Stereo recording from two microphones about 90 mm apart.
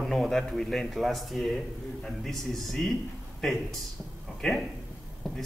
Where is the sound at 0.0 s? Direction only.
5° left (ahead or behind).